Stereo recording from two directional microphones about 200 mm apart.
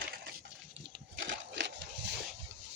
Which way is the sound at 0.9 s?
65° right (ahead or behind).